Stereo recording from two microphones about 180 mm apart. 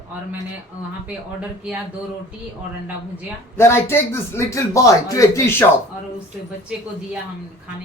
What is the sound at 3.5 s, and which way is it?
Speech, 15° left (ahead or behind).